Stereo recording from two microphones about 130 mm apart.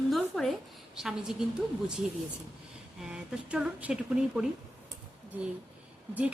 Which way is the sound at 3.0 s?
10° right (ahead or behind).